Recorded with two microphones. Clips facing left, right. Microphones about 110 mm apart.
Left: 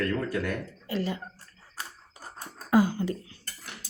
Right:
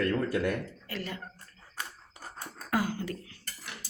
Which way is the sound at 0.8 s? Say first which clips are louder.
Left 7 dB; 20° left (ahead or behind).